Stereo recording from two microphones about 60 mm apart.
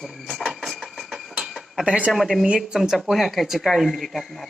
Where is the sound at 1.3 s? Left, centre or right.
Centre.